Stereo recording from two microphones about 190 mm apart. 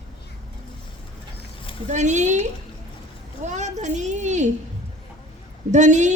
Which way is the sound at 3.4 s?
40° right (ahead or behind).